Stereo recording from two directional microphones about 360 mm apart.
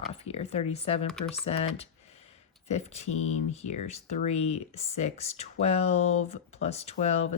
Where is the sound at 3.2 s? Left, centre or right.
Left.